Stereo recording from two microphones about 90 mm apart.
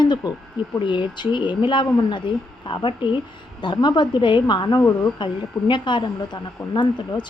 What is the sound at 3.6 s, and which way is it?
Speech, 55° left (ahead or behind).